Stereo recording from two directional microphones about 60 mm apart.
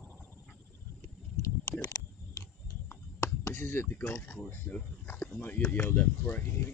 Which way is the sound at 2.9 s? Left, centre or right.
Left.